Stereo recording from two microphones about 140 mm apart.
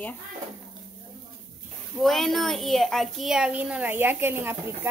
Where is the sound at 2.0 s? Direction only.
Centre (ahead or behind); by 4.9 s 15° right (ahead or behind).